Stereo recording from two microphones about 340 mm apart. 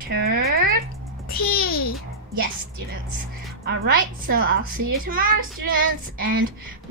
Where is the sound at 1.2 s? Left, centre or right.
Left.